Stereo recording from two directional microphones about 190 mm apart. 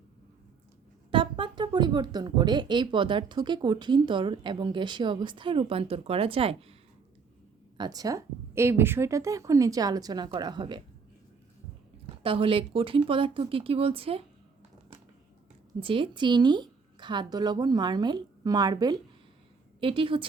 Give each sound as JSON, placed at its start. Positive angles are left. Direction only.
{"t": 1.1, "sound": "speech", "side_deg": -25}
{"t": 7.8, "sound": "speech", "side_deg": -20}
{"t": 12.0, "sound": "speech", "side_deg": -30}
{"t": 15.8, "sound": "speech", "side_deg": -25}